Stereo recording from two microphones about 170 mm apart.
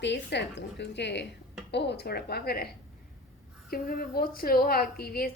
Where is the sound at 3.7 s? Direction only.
60° left (ahead or behind).